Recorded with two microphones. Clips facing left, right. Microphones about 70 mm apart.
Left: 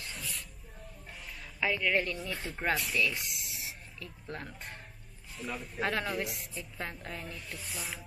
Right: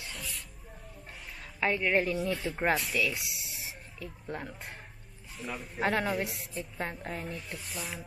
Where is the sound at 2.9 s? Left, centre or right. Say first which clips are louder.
Even; centre.